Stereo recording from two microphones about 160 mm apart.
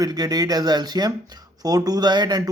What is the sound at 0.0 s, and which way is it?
Speech, 25° right (ahead or behind).